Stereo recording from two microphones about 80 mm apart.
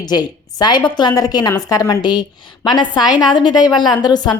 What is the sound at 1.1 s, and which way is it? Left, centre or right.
Speech, left.